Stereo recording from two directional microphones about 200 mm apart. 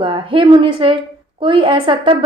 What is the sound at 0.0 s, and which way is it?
A woman's voice, 25° right (ahead or behind).